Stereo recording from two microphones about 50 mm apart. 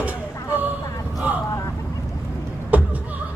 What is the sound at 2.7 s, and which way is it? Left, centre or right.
Vehicle, right.